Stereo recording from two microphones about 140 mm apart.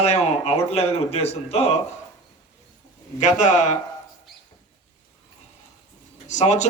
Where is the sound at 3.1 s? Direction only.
60° left (ahead or behind).